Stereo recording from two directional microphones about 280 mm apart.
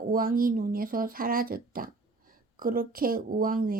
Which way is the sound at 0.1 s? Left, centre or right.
Right.